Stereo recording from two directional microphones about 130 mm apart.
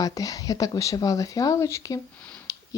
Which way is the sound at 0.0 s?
30° left (ahead or behind).